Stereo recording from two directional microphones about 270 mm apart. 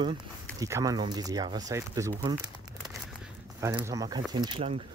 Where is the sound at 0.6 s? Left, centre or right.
Centre.